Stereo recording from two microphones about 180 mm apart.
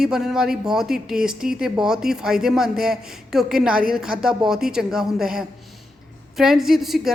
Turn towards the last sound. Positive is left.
turn(degrees=0)  # may be behind; listen again after turning